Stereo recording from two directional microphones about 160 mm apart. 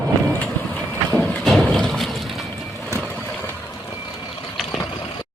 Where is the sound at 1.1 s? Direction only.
5° left (ahead or behind).